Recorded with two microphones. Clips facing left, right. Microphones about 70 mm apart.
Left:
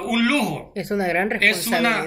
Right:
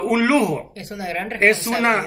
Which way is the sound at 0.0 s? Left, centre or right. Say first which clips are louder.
Right 3 dB; right.